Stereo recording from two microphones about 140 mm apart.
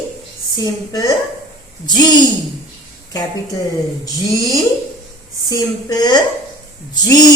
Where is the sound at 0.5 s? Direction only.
25° left (ahead or behind).